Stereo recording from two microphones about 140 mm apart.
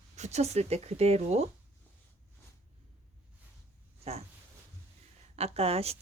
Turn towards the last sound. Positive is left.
turn(degrees=-45)  # may be behind; listen again after turning